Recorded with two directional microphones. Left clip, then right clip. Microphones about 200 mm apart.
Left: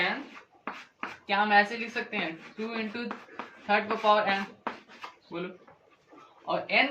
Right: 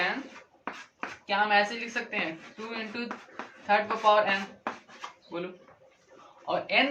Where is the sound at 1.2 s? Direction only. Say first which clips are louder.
Left 1 dB; 15° right (ahead or behind).